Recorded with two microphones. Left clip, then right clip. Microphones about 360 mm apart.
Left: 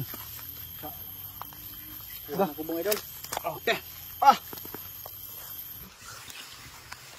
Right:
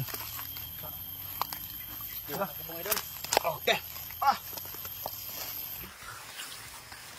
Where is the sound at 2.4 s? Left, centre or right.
Centre.